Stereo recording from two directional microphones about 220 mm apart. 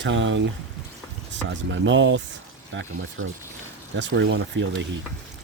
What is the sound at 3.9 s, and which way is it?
Speech, 55° right (ahead or behind).